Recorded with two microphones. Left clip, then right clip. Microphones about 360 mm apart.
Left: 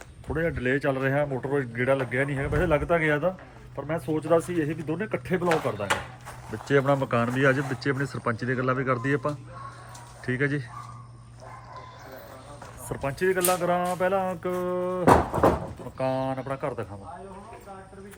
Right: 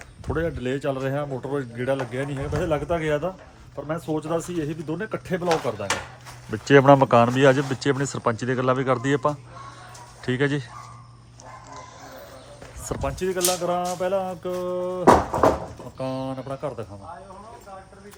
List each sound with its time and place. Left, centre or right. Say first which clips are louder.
0.3 s speech: left 1 dB; centre
6.5 s speech: right 8 dB; right
10.2 s speech: right 3 dB; right
12.9 s speech: left 1 dB; centre